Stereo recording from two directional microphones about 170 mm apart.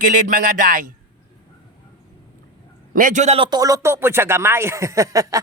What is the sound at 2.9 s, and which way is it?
A man's voice, 50° right (ahead or behind).